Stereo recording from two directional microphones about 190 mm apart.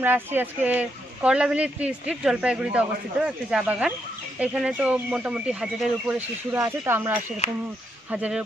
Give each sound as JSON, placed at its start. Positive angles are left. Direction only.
{"t": 0.0, "sound": "speech", "side_deg": -10}